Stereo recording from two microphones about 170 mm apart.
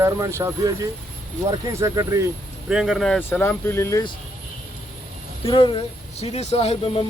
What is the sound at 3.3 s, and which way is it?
Speech, 15° left (ahead or behind).